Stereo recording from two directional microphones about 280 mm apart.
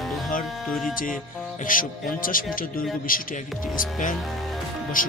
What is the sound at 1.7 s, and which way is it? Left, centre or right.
Speech, left.